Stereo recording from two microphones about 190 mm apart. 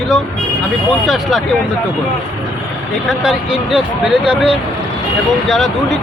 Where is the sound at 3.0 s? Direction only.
5° right (ahead or behind).